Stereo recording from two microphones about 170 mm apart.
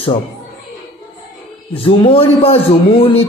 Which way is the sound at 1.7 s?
35° left (ahead or behind).